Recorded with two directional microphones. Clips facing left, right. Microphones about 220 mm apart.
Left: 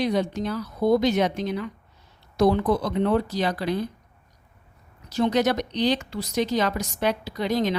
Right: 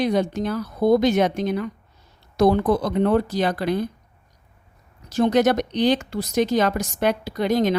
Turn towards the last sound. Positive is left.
turn(degrees=-50)  # may be behind; listen again after turning